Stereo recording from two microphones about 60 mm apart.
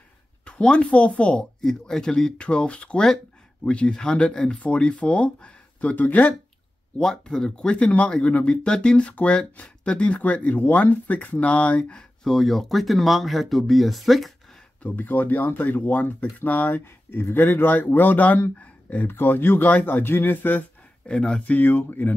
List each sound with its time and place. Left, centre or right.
0.5 s speech: centre
1.6 s speech: centre; by 6.3 s left
7.0 s speech: centre
12.2 s speech: centre
14.8 s speech: left
18.6 s a sound: left
19.0 s speech: left
21.1 s speech: centre
21.5 s speech: left